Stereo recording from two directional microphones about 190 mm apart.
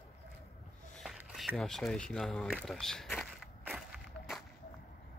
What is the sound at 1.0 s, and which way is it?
Speech, centre (ahead or behind).